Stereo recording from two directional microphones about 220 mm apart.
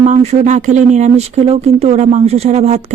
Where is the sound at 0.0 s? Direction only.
30° right (ahead or behind).